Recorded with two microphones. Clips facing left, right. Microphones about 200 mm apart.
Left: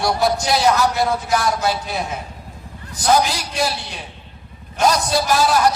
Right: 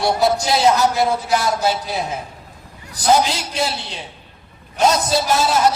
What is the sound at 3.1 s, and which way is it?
A man's voice, 25° right (ahead or behind).